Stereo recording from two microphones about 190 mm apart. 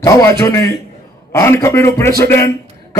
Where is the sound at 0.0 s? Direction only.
15° left (ahead or behind).